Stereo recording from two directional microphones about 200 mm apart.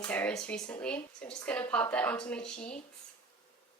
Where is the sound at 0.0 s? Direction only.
5° left (ahead or behind).